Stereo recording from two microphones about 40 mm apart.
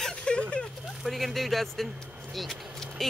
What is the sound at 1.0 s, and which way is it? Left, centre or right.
Speech, centre.